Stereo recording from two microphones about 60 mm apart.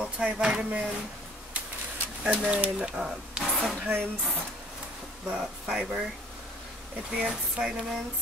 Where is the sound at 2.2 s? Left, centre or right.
Right.